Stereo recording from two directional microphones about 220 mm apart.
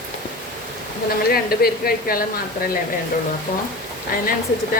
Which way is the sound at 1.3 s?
45° left (ahead or behind).